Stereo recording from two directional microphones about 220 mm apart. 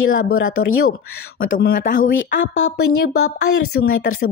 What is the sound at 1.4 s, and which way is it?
Speech, 55° left (ahead or behind).